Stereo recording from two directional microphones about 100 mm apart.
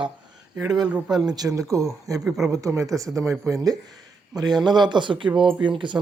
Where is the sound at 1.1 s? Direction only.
40° right (ahead or behind).